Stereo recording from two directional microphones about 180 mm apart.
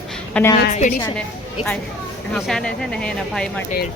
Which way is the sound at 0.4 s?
5° left (ahead or behind).